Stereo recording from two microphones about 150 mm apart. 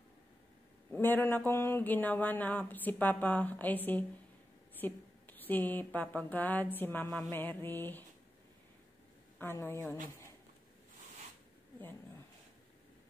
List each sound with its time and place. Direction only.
0.9 s speech: 15° left (ahead or behind)
9.4 s speech: 15° left (ahead or behind)